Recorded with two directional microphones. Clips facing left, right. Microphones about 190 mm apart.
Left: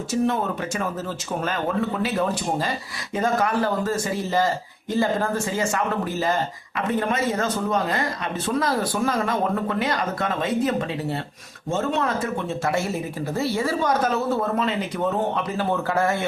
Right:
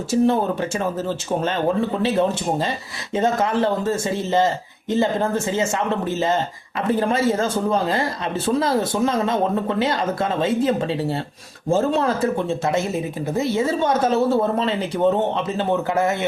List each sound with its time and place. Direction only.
0.1 s speech: 30° right (ahead or behind)